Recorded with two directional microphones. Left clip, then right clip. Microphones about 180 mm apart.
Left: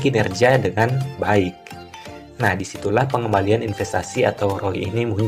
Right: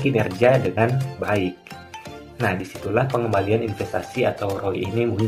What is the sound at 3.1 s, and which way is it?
Speech, 50° left (ahead or behind).